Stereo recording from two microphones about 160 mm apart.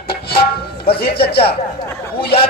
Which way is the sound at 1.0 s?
75° left (ahead or behind).